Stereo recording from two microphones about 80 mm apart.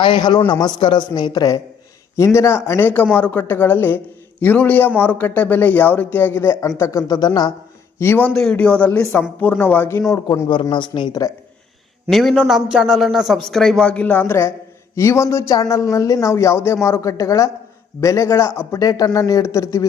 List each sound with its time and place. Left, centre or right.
0.0 s speech: left
2.1 s speech: left
6.6 s speech: left
7.1 s speech: left
7.9 s speech: left
8.3 s speech: centre; by 10.0 s left
10.5 s speech: left
12.1 s a man's voice: centre
12.4 s a man's voice: centre; by 18.8 s left
18.8 s speech: left